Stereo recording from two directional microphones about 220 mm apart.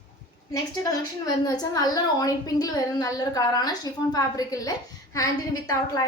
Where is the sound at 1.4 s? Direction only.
15° left (ahead or behind).